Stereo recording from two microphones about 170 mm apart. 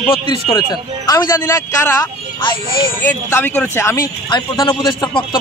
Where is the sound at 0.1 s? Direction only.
30° left (ahead or behind).